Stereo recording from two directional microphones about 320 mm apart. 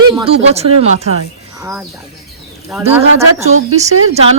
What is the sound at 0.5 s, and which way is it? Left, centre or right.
Speech, centre.